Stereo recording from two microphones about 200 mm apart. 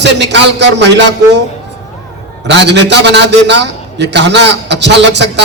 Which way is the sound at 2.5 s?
60° right (ahead or behind).